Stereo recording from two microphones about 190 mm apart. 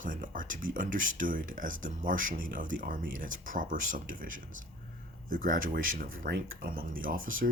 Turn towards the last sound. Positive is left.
turn(degrees=-45)  # may be behind; listen again after turning